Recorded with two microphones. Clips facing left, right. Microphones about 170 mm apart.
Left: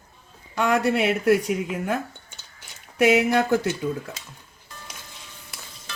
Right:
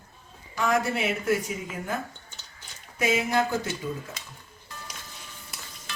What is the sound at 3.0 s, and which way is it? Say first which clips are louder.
Speech: left 6 dB; 70° left (ahead or behind).